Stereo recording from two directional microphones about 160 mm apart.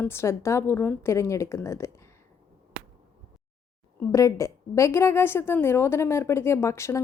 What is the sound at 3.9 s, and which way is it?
Speech, 20° left (ahead or behind).